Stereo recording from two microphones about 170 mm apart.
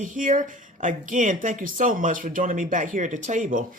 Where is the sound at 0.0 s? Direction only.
50° right (ahead or behind).